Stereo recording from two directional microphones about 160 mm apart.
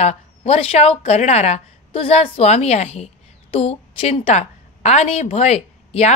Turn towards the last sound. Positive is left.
turn(degrees=45)  # may be behind; listen again after turning